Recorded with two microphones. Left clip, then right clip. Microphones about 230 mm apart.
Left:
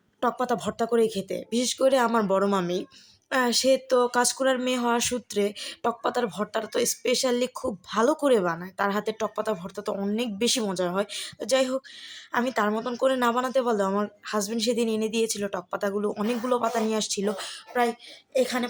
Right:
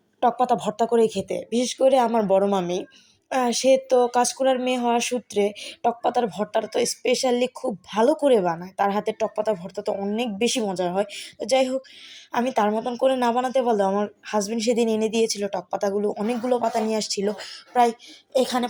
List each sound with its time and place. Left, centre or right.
0.2 s speech: centre
15.1 s speech: left
15.4 s speech: centre
18.3 s speech: centre